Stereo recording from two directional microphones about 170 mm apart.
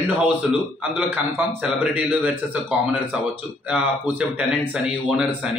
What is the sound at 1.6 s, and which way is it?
Speech, 5° right (ahead or behind).